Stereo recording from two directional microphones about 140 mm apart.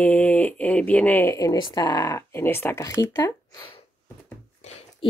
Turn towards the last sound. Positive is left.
turn(degrees=50)  # may be behind; listen again after turning